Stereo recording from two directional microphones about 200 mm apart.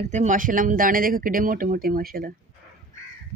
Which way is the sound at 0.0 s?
35° right (ahead or behind).